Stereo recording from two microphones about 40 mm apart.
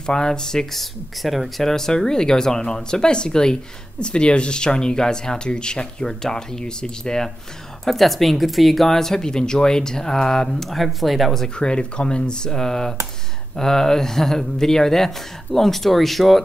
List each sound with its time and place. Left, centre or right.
0.0 s speech: centre
0.7 s speech: centre
1.6 s speech: centre
7.8 s speech: centre
10.7 s speech: centre
11.4 s speech: left; by 16.4 s centre